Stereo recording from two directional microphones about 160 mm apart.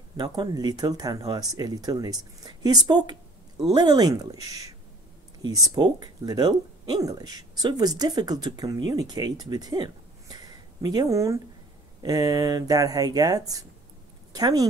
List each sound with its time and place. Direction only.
0.2 s speech: 25° right (ahead or behind)